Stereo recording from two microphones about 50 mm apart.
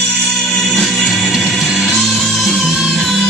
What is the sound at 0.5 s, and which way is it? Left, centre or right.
Music, centre.